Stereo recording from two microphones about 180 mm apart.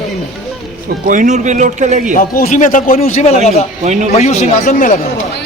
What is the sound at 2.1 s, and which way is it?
Speech, 50° left (ahead or behind).